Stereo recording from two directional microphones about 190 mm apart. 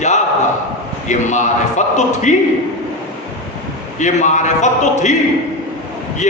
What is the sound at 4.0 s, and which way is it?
A man's voice, 40° left (ahead or behind).